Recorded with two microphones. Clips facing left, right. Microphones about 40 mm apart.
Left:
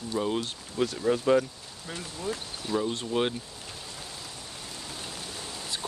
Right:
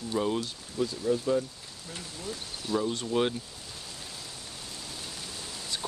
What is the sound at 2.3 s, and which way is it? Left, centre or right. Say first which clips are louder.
Speech: left 1 dB; centre.